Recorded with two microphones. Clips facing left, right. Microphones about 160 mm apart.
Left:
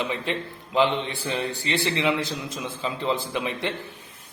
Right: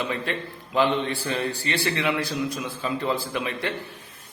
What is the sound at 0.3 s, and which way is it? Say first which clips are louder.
A man's voice: left 1 dB; 20° left (ahead or behind).